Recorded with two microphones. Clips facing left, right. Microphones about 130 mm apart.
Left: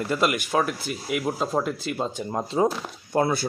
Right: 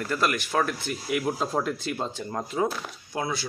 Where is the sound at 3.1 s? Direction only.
50° left (ahead or behind).